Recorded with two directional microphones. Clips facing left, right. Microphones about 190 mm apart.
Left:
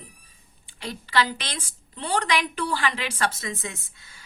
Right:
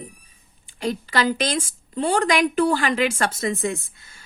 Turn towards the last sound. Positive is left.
turn(degrees=-50)  # may be behind; listen again after turning